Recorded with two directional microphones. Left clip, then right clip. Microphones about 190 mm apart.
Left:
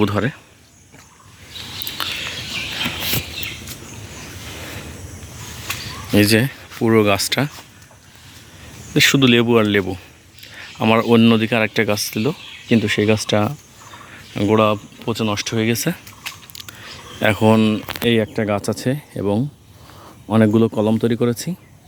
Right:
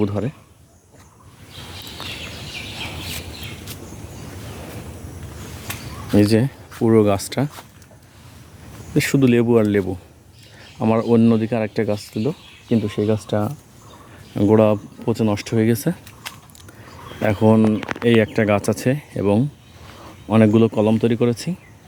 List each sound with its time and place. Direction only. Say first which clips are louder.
0.2 s speech: left 5 dB; 10° left (ahead or behind)
2.0 s a sound: left 7 dB; 5° right (ahead or behind)
6.1 s speech: left 2 dB; 10° right (ahead or behind)
8.9 s speech: left 4 dB; centre (ahead or behind)
12.2 s speech: left 2 dB; 15° left (ahead or behind)
14.3 s speech: right 1 dB; 25° right (ahead or behind)
16.6 s a sound: left 6 dB; 10° right (ahead or behind)
17.3 s speech: right 1 dB; 10° right (ahead or behind)